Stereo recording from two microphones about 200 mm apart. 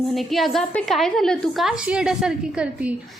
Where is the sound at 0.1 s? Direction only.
Centre (ahead or behind).